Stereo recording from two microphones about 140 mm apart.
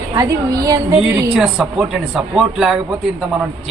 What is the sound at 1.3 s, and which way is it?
A man's voice, 5° right (ahead or behind).